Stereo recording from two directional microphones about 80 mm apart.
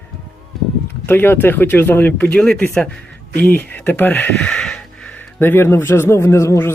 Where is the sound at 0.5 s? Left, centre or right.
Centre.